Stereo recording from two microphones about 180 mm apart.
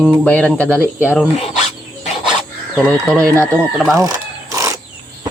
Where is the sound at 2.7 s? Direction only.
5° left (ahead or behind).